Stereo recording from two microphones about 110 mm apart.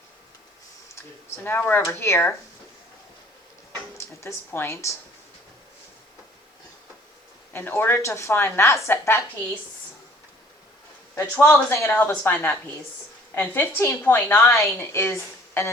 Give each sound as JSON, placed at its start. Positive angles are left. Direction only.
{"t": 1.5, "sound": "a woman's voice", "side_deg": 20}
{"t": 3.9, "sound": "speech", "side_deg": 25}
{"t": 7.5, "sound": "a woman's voice", "side_deg": 20}
{"t": 11.1, "sound": "a woman's voice", "side_deg": 25}